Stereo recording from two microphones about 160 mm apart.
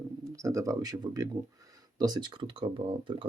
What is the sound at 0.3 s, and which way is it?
Speech, 20° right (ahead or behind).